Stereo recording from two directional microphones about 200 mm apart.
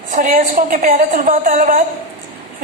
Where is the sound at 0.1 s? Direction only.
40° right (ahead or behind).